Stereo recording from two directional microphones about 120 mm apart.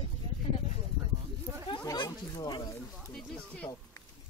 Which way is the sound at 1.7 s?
35° left (ahead or behind).